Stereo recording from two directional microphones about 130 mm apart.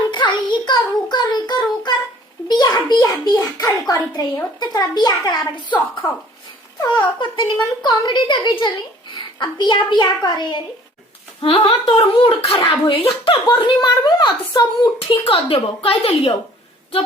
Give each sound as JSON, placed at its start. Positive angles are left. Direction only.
{"t": 0.1, "sound": "child singing", "side_deg": 35}
{"t": 2.5, "sound": "a sound", "side_deg": 35}
{"t": 3.6, "sound": "a child's voice", "side_deg": 30}
{"t": 11.3, "sound": "a woman's voice", "side_deg": 50}